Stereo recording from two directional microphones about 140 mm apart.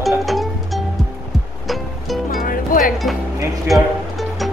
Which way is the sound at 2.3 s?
80° left.